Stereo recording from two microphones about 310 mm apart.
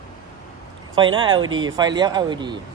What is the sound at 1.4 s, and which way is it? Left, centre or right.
Speech, right.